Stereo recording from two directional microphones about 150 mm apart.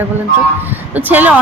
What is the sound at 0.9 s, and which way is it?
Speech, 10° right (ahead or behind).